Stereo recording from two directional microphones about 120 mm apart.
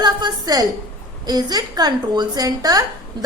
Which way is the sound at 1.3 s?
35° right (ahead or behind).